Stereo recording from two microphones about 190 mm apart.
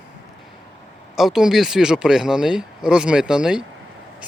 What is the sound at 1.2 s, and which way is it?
Speech, centre (ahead or behind).